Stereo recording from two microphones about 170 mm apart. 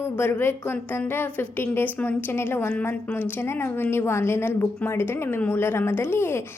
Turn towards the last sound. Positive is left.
turn(degrees=15)  # may be behind; listen again after turning